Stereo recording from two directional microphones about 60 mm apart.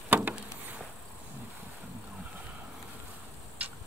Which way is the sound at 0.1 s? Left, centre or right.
Right.